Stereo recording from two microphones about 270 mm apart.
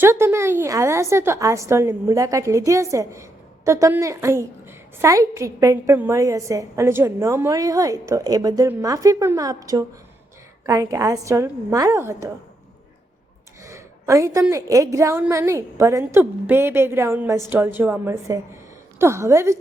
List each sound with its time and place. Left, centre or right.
0.0 s a woman's voice: centre
13.7 s a woman's voice: centre